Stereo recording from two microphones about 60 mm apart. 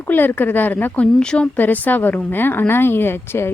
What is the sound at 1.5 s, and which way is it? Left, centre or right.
A woman's voice, left.